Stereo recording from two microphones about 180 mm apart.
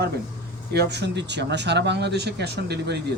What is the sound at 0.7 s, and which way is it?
A man's voice, 65° right (ahead or behind).